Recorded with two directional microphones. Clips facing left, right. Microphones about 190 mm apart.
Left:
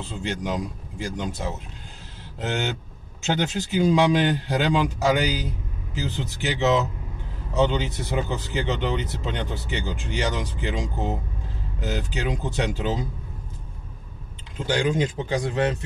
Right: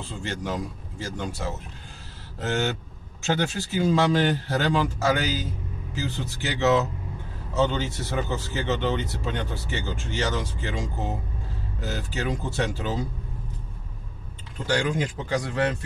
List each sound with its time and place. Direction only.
0.0 s a man's voice: 20° left (ahead or behind)
14.7 s speech: 20° left (ahead or behind)